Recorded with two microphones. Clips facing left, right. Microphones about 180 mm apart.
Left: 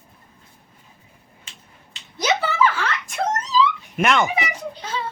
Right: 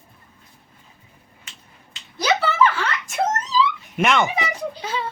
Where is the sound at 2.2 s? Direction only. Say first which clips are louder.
Right 1 dB; 20° left (ahead or behind).